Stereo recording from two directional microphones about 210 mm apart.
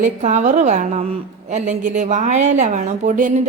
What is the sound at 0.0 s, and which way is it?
A woman's voice, 35° right (ahead or behind).